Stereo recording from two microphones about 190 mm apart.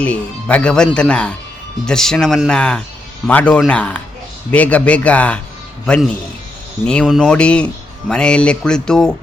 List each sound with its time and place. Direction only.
0.0 s a man's voice: 5° left (ahead or behind)